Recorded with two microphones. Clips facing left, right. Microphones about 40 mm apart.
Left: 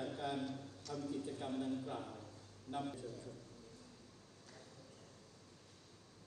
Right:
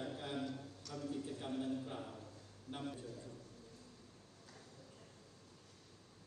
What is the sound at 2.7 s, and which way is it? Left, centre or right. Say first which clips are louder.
Speech: left 5 dB; left.